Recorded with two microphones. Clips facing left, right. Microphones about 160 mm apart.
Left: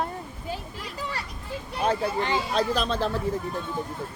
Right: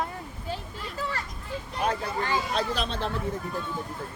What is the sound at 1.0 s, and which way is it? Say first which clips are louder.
A child's voice: right 1 dB; 15° left (ahead or behind).